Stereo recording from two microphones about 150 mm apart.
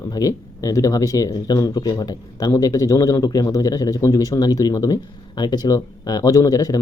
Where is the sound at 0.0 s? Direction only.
25° left (ahead or behind).